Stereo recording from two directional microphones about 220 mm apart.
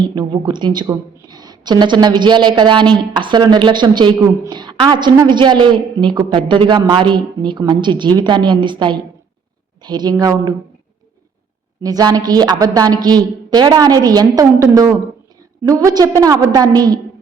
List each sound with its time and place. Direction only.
0.1 s a woman's voice: 20° right (ahead or behind)
11.8 s a woman's voice: 15° right (ahead or behind)